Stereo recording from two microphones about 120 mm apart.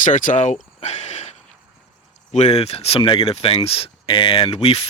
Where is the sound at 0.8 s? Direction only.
70° left (ahead or behind).